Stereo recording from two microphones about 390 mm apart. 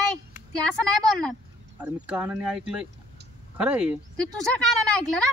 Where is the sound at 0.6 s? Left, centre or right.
Centre.